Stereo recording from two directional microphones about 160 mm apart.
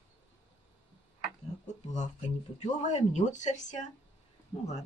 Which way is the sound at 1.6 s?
50° left (ahead or behind).